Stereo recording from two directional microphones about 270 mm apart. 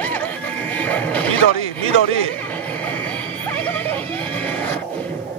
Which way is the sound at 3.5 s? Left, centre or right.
Centre.